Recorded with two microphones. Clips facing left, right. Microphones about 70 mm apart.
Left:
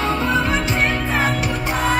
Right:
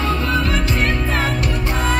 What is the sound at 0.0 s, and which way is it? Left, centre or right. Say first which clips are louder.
Music: left 1 dB; left.